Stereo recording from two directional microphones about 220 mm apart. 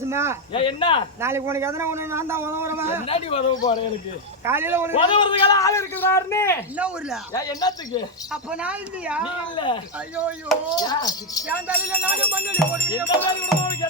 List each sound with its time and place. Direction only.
0.0 s speech: 10° right (ahead or behind)
0.5 s speech: 25° left (ahead or behind)
1.2 s a man's voice: 10° right (ahead or behind)
3.1 s speech: 25° left (ahead or behind)
4.4 s a man's voice: 10° right (ahead or behind)
5.0 s a man's voice: 20° left (ahead or behind)
6.7 s speech: 5° right (ahead or behind)
7.3 s a man's voice: 15° left (ahead or behind)
8.3 s speech: 5° right (ahead or behind)
10.8 s a man's voice: 20° left (ahead or behind)
11.4 s a man's voice: 5° right (ahead or behind)